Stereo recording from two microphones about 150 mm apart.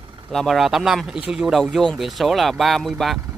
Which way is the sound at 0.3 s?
Centre (ahead or behind).